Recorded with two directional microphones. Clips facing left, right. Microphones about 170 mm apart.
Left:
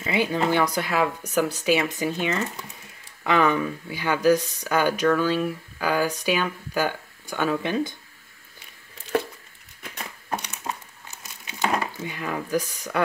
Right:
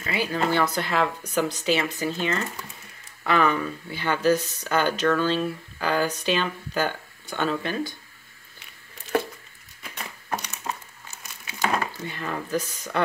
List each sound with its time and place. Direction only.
0.0 s speech: 20° left (ahead or behind)
10.6 s crumpling: 15° left (ahead or behind)